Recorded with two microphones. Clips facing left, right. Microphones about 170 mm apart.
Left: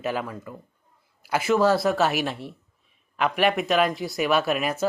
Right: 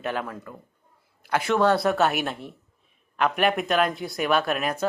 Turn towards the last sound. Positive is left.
turn(degrees=5)  # may be behind; listen again after turning